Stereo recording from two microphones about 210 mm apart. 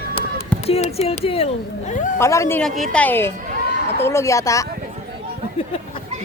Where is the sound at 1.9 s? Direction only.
35° left (ahead or behind).